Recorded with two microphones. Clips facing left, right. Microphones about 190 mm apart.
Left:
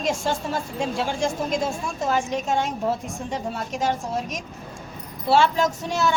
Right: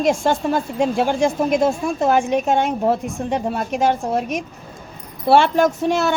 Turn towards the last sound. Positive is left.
turn(degrees=-60)  # may be behind; listen again after turning